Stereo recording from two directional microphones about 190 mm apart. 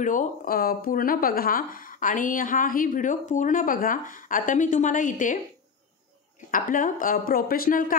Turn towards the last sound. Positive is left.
turn(degrees=50)  # may be behind; listen again after turning